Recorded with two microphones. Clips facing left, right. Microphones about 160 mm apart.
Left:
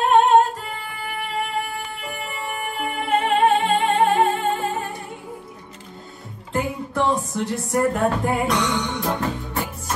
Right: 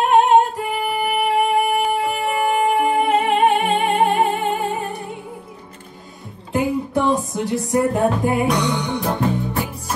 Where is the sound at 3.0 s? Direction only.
15° right (ahead or behind).